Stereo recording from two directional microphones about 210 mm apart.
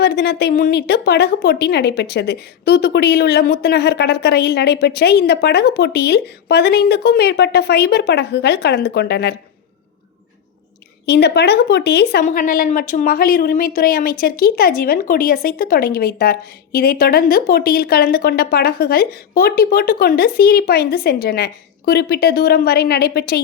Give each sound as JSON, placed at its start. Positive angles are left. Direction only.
{"t": 0.0, "sound": "a woman's voice", "side_deg": 50}
{"t": 11.0, "sound": "a woman's voice", "side_deg": 50}
{"t": 12.2, "sound": "a woman's voice", "side_deg": 40}